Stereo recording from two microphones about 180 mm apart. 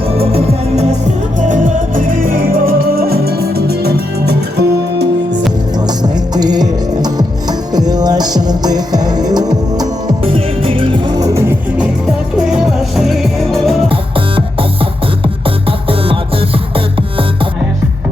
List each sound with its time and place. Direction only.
0.2 s music: 35° right (ahead or behind); by 5.5 s 70° right (ahead or behind)
6.0 s music: 20° right (ahead or behind)
12.5 s music: centre (ahead or behind)
13.8 s music: 30° right (ahead or behind)